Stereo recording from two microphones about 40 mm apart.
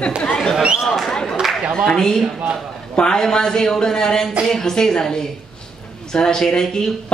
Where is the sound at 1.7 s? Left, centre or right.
Centre.